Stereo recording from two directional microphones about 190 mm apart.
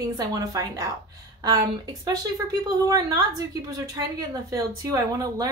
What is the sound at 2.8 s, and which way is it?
A woman's voice, 20° right (ahead or behind).